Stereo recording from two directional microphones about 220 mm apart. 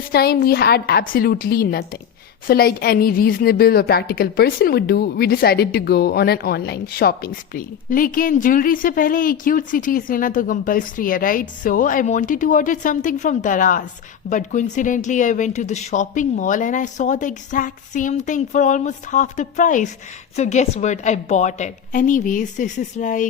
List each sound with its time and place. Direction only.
0.1 s a woman's voice: 45° left (ahead or behind)